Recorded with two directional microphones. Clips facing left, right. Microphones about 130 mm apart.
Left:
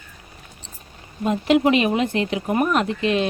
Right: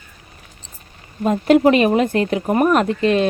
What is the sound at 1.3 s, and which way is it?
Speech, 45° right (ahead or behind).